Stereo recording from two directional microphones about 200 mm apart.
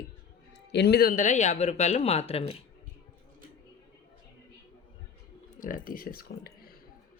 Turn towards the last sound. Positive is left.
turn(degrees=50)  # may be behind; listen again after turning